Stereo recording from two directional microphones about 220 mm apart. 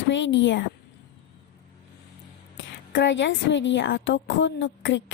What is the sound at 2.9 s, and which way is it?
A woman's voice, 55° left (ahead or behind).